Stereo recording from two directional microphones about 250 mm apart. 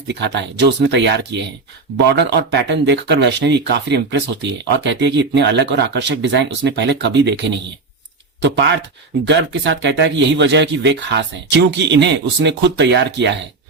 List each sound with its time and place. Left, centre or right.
0.1 s speech: right